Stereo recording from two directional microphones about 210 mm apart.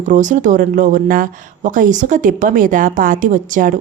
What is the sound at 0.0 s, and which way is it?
Speech, 35° right (ahead or behind).